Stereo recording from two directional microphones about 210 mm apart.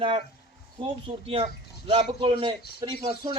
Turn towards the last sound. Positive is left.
turn(degrees=-20)  # may be behind; listen again after turning